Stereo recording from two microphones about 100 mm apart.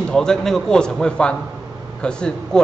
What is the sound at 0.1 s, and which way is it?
A man's voice, 5° left (ahead or behind).